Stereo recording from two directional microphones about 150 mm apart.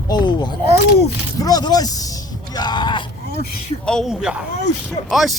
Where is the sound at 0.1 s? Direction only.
30° left (ahead or behind).